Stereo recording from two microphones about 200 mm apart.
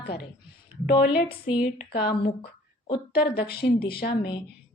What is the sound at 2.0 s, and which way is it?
Speech, 50° left (ahead or behind).